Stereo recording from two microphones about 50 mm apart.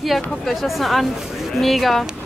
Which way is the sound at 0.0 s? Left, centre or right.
Centre.